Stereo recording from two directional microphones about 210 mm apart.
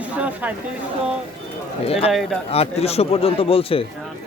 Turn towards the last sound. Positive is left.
turn(degrees=25)  # may be behind; listen again after turning